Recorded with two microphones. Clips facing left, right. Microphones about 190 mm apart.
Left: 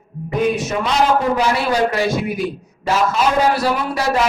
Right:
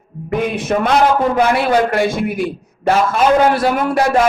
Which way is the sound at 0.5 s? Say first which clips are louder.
Right 4 dB; 55° right (ahead or behind).